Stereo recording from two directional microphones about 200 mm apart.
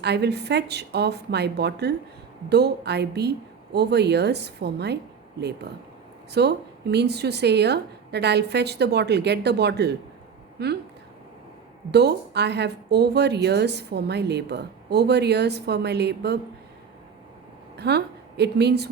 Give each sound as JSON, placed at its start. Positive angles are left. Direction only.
{"t": 0.0, "sound": "a woman's voice", "side_deg": -55}
{"t": 6.3, "sound": "a woman's voice", "side_deg": -55}
{"t": 11.9, "sound": "a woman's voice", "side_deg": -55}
{"t": 17.7, "sound": "a woman's voice", "side_deg": -55}